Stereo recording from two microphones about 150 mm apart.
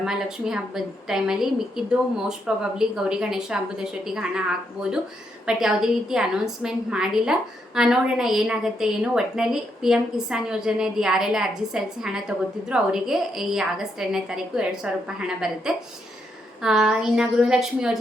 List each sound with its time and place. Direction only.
0.0 s a woman's voice: 5° right (ahead or behind)
16.6 s a woman's voice: 5° right (ahead or behind)